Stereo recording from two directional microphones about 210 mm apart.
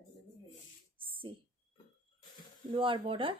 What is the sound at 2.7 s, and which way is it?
Speech, 25° right (ahead or behind).